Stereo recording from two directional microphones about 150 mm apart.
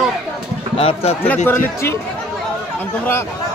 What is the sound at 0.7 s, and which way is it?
Speech, 40° left (ahead or behind).